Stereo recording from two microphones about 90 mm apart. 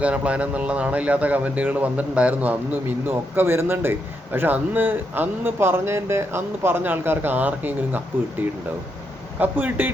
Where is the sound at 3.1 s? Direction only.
25° right (ahead or behind).